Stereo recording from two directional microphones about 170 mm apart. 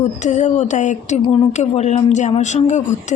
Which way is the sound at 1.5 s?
40° left (ahead or behind).